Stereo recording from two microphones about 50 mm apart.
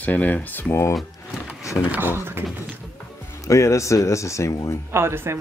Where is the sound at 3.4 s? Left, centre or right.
Left.